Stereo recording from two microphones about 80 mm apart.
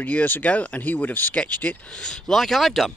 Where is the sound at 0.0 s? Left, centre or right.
Left; by 2.9 s centre.